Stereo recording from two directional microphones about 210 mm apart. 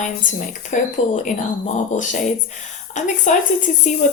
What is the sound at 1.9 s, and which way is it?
Speech, 35° left (ahead or behind).